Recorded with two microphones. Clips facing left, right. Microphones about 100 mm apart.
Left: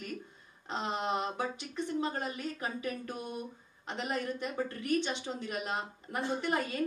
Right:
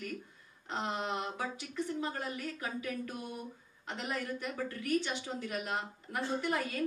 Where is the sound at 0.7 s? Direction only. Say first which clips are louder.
Left 2 dB; 20° left (ahead or behind).